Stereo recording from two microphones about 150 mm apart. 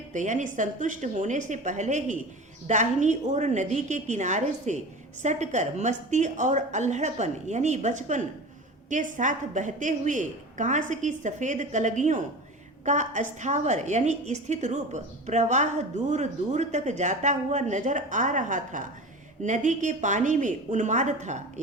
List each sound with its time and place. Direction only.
0.1 s a woman's voice: 55° right (ahead or behind)